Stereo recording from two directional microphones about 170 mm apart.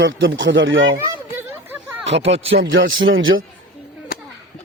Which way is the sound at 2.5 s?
90° right.